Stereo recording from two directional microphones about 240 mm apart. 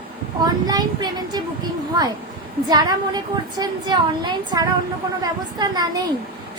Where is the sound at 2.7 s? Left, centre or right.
Centre.